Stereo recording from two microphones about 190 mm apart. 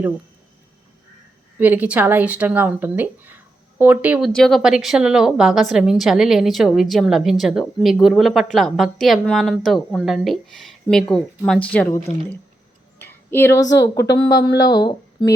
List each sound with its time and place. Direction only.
1.5 s speech: 10° right (ahead or behind)
4.3 s a woman's voice: 5° left (ahead or behind); by 15.3 s 20° left (ahead or behind)